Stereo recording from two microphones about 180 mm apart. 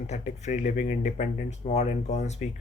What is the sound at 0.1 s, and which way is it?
Speech, 40° left (ahead or behind).